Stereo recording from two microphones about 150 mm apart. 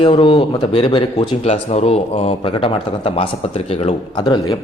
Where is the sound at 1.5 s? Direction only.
45° left (ahead or behind).